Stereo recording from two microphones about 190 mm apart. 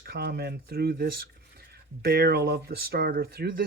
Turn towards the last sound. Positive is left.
turn(degrees=-50)  # may be behind; listen again after turning